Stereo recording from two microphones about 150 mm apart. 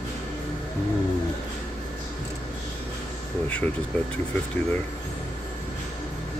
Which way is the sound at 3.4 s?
10° left (ahead or behind).